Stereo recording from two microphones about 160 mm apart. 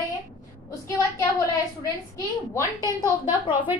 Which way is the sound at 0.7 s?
20° left (ahead or behind).